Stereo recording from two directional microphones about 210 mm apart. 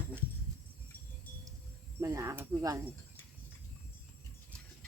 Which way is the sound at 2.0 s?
15° right (ahead or behind).